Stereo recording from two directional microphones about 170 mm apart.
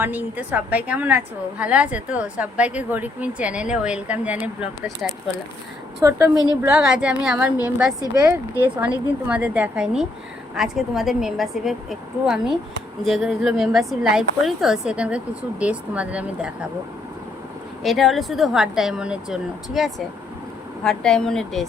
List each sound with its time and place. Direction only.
0.0 s a woman's voice: 10° right (ahead or behind)
6.0 s a woman's voice: 15° right (ahead or behind)
6.3 s a woman's voice: 20° left (ahead or behind)
6.6 s a woman's voice: 10° right (ahead or behind)
8.1 s a woman's voice: 15° right (ahead or behind)
17.8 s speech: centre (ahead or behind)